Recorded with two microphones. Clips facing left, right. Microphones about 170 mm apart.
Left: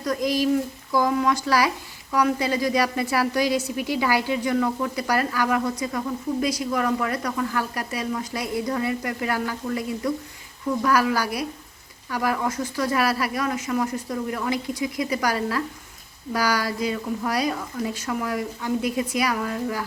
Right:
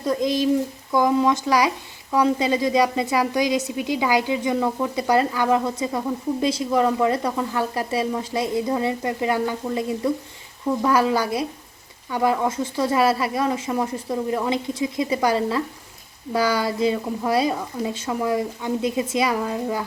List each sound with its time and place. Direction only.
0.0 s a woman's voice: 25° right (ahead or behind)